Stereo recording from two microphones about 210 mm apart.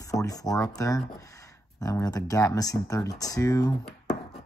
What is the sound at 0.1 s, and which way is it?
Speech, 15° left (ahead or behind).